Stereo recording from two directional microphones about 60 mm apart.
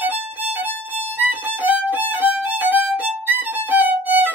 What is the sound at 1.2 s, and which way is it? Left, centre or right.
Violin, right.